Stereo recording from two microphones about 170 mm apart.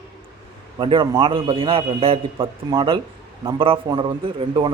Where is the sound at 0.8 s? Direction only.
30° right (ahead or behind).